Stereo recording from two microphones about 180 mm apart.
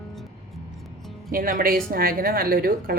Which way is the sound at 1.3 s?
50° right (ahead or behind).